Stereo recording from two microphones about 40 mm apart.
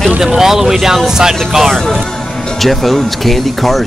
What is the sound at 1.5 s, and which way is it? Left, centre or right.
Speech, centre.